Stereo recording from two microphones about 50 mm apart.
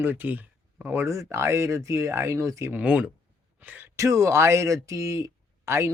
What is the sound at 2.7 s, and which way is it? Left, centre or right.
Speech, right.